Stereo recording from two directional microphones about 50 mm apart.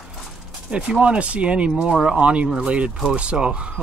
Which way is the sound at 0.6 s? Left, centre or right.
Right.